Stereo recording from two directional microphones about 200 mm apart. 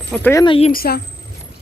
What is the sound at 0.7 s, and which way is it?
Speech, 45° left (ahead or behind).